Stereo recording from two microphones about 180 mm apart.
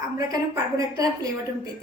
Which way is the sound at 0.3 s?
20° right (ahead or behind).